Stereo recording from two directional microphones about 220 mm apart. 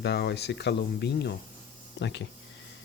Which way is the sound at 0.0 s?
50° left (ahead or behind).